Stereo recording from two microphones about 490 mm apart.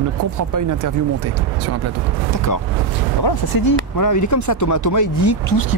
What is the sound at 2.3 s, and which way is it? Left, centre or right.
Speech, left.